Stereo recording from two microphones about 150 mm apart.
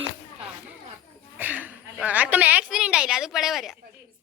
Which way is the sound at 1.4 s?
10° right (ahead or behind).